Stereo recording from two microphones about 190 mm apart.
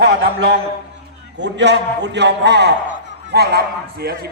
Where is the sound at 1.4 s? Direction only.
65° right (ahead or behind).